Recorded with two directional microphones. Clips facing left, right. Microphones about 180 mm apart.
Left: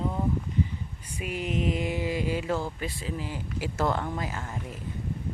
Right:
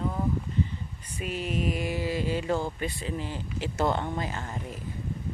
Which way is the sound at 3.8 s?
25° right (ahead or behind).